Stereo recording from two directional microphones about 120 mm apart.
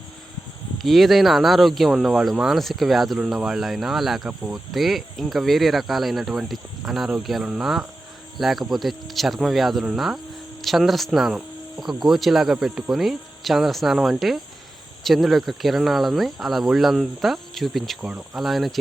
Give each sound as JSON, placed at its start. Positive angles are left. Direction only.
{"t": 0.8, "sound": "speech", "side_deg": 0}